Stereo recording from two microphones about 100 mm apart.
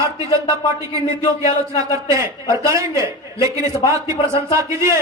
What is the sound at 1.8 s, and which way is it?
A man's voice, 30° right (ahead or behind).